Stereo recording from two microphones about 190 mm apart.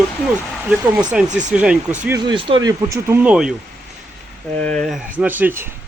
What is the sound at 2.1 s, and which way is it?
Speech, 25° right (ahead or behind).